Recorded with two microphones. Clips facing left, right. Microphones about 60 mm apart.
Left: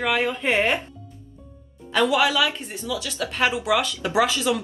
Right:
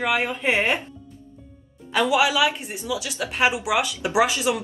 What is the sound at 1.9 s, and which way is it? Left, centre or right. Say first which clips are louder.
Speech: even; centre.